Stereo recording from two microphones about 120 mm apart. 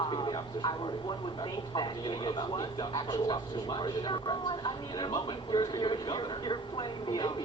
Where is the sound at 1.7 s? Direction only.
40° left (ahead or behind).